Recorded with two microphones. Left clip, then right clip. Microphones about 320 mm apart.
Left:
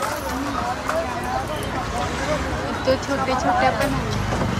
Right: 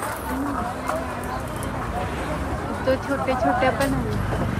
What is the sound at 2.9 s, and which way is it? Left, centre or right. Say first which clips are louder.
Speech: left 1 dB; centre.